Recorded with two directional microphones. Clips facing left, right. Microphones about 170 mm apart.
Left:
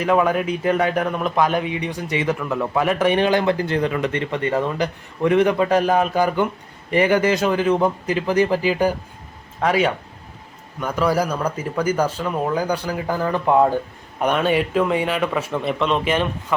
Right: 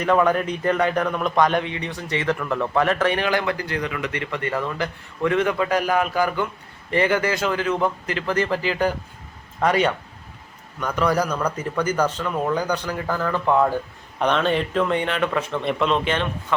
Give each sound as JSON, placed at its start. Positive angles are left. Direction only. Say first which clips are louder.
{"t": 0.0, "sound": "speech", "louder": "left 1 dB", "side_deg": 5}